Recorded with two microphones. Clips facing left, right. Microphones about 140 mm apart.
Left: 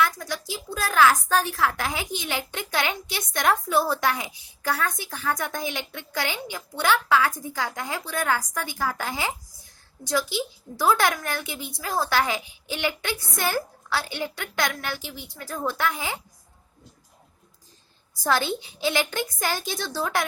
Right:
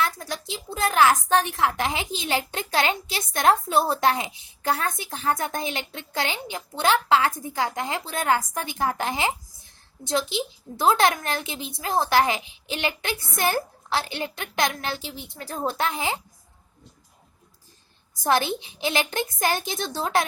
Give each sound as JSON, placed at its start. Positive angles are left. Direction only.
{"t": 0.0, "sound": "a woman's voice", "side_deg": -25}
{"t": 18.2, "sound": "speech", "side_deg": -20}